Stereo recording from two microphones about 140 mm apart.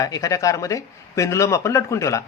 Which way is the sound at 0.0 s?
25° left (ahead or behind).